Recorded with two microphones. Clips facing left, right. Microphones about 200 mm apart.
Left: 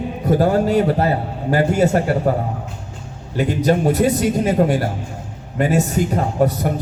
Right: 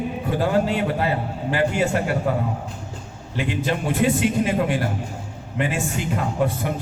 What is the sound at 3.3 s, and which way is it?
Speech, 40° left (ahead or behind).